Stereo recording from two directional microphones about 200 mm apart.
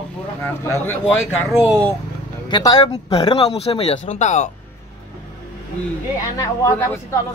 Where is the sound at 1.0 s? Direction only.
Centre (ahead or behind).